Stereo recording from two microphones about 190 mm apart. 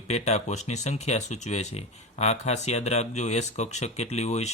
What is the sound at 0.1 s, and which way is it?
Speech, 35° left (ahead or behind).